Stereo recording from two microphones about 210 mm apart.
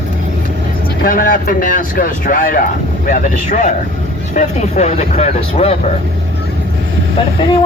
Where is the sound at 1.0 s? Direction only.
40° left (ahead or behind).